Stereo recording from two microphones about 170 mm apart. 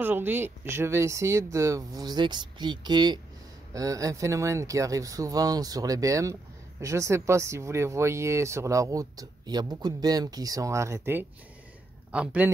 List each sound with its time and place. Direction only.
0.0 s speech: 10° right (ahead or behind)